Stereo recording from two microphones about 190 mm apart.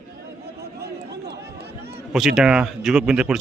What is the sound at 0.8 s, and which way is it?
Run, 60° right (ahead or behind).